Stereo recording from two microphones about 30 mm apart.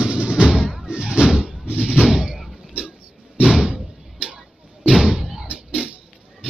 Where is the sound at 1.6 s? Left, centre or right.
Right.